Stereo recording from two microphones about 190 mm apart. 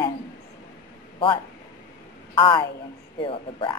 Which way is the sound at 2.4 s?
25° left (ahead or behind).